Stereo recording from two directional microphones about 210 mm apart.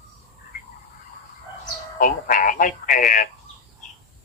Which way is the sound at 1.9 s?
40° left (ahead or behind).